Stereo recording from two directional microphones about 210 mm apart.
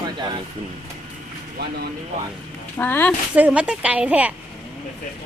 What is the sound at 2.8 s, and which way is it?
Speech, 10° left (ahead or behind).